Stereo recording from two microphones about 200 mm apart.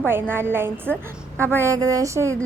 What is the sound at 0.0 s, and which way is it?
A woman's voice, 10° right (ahead or behind).